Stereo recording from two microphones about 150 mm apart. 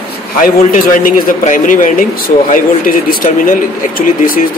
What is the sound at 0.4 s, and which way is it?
A man's voice, 65° left (ahead or behind).